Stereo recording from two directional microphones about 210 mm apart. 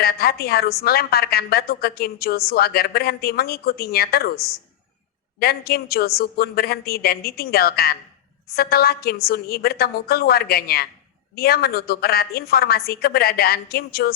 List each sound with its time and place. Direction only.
0.0 s a woman's voice: 45° left (ahead or behind)